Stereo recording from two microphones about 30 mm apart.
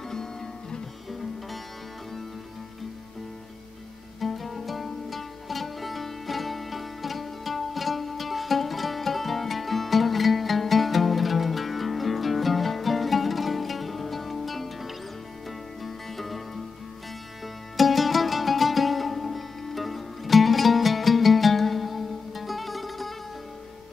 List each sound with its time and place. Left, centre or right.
0.1 s music: centre
4.2 s music: centre
17.7 s music: centre